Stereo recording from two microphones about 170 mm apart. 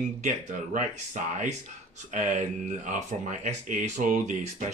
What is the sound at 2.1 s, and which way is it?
Speech, 50° right (ahead or behind).